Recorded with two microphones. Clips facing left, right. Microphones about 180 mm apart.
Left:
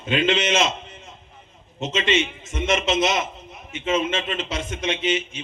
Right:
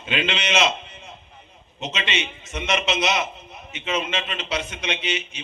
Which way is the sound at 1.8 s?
45° left (ahead or behind).